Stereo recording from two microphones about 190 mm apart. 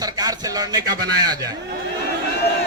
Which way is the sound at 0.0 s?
20° right (ahead or behind).